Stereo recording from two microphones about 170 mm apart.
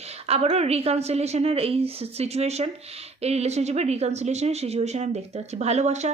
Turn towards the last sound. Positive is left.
turn(degrees=-40)  # may be behind; listen again after turning